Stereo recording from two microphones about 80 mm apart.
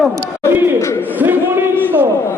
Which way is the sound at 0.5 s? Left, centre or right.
Right.